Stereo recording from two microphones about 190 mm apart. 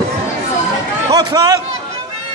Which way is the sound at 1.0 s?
20° right (ahead or behind).